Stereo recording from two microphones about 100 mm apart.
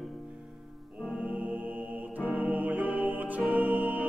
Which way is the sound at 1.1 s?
15° right (ahead or behind).